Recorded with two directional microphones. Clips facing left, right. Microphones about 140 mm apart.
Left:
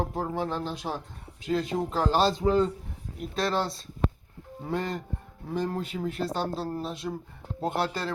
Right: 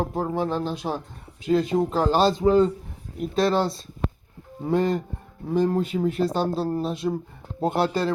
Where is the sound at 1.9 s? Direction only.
15° right (ahead or behind).